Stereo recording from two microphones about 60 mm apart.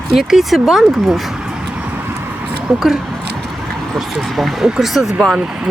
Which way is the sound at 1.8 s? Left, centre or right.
Right.